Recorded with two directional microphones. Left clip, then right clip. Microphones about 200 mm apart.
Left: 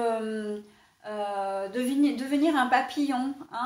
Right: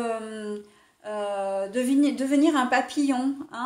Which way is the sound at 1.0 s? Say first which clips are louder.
Right 2 dB; 50° right (ahead or behind).